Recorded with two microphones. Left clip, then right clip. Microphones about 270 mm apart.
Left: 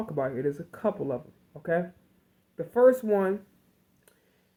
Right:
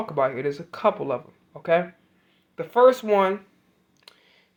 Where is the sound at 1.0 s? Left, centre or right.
Right.